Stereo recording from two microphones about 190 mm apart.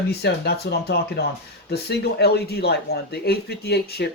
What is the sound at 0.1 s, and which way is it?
Speech, 60° left (ahead or behind).